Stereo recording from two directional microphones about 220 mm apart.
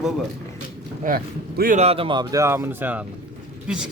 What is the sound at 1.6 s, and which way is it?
Speech, 35° right (ahead or behind).